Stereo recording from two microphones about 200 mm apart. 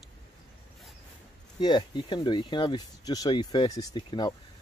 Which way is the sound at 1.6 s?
20° left (ahead or behind).